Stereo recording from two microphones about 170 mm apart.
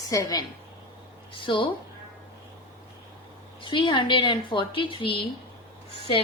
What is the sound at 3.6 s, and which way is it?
A woman's voice, 30° left (ahead or behind).